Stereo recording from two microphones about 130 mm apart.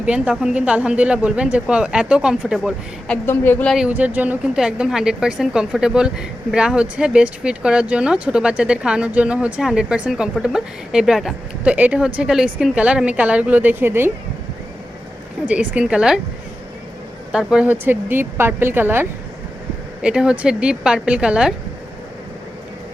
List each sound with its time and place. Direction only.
0.0 s a woman's voice: 10° right (ahead or behind)
3.1 s a woman's voice: 15° left (ahead or behind)
3.7 s a woman's voice: 5° right (ahead or behind)
15.4 s a woman's voice: 10° right (ahead or behind)
17.3 s a woman's voice: 10° right (ahead or behind)